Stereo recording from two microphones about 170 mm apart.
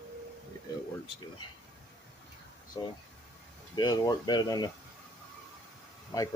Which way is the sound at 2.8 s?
20° left (ahead or behind).